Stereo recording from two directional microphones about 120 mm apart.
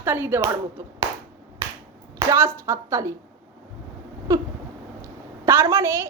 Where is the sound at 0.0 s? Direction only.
15° right (ahead or behind).